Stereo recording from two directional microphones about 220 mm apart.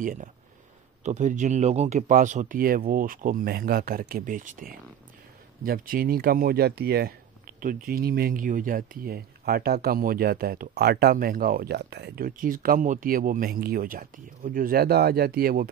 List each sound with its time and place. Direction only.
0.0 s speech: 35° right (ahead or behind)